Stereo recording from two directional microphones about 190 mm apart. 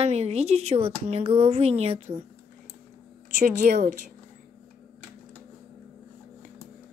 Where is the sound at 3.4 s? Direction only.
45° right (ahead or behind).